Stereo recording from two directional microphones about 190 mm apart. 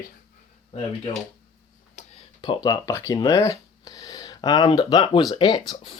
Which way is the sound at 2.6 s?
20° left (ahead or behind).